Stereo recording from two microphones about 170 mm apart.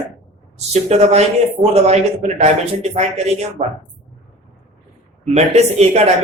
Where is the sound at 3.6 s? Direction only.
55° right (ahead or behind).